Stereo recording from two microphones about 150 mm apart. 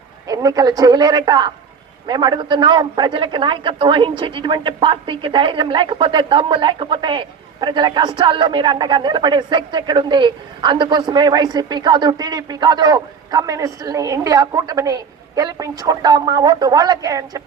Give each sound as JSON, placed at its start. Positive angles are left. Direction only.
{"t": 0.3, "sound": "a woman's voice", "side_deg": -25}